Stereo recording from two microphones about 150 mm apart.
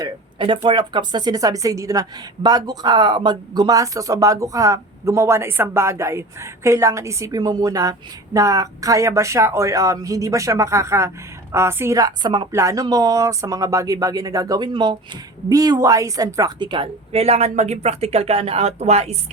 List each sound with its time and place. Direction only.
0.0 s speech: 35° right (ahead or behind)
12.5 s a woman's voice: 20° right (ahead or behind); by 19.1 s 45° right (ahead or behind)